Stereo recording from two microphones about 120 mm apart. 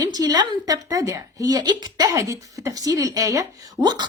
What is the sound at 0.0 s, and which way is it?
A woman's voice, 35° right (ahead or behind).